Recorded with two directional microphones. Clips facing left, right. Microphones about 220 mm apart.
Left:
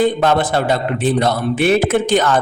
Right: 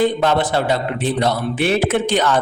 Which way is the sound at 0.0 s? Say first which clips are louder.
Left 2 dB; 45° left (ahead or behind).